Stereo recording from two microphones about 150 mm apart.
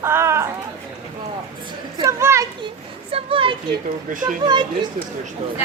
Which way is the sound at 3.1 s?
35° right (ahead or behind).